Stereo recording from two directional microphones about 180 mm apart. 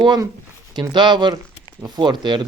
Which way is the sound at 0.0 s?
25° right (ahead or behind).